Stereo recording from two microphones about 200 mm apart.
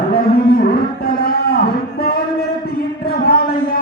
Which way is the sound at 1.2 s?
50° left (ahead or behind).